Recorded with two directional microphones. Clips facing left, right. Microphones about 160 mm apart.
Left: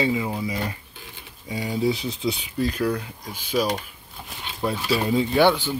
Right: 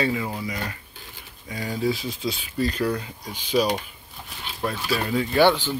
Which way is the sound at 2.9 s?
5° left (ahead or behind).